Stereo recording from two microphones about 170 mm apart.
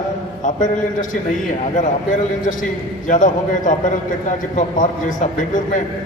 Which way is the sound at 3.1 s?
50° left (ahead or behind).